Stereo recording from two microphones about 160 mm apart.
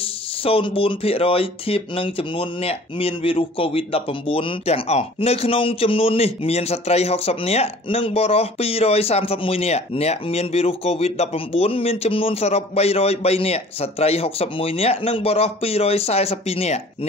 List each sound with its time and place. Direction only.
0.0 s speech: 35° left (ahead or behind)